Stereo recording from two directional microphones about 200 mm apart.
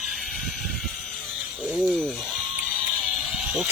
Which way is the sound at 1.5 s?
5° right (ahead or behind).